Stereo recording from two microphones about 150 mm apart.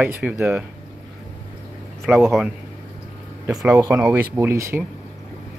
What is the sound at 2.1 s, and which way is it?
Speech, 5° right (ahead or behind).